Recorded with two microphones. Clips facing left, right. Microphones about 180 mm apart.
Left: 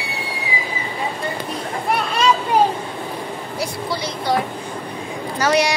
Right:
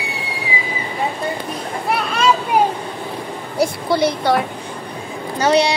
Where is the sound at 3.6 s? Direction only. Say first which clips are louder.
Right 9 dB; 60° right (ahead or behind).